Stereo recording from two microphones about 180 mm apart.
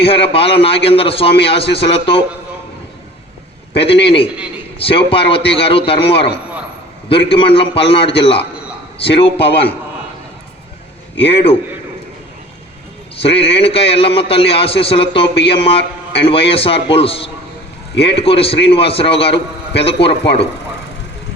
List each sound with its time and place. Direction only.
0.0 s a man's voice: 30° left (ahead or behind)
3.8 s a man's voice: 30° left (ahead or behind)
13.1 s a man's voice: 30° left (ahead or behind)